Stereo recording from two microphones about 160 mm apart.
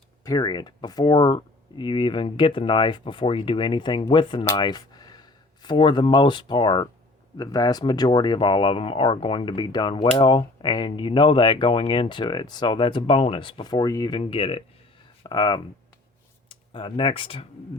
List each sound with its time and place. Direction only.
0.3 s speech: 25° left (ahead or behind)